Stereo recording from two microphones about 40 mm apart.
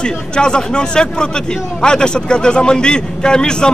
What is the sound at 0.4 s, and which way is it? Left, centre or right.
Speech, left.